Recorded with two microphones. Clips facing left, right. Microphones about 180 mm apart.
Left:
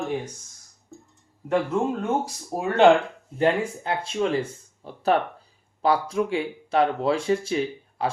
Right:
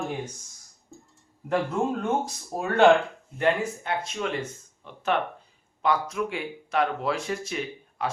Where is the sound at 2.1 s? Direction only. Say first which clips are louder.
Left 1 dB; 10° left (ahead or behind).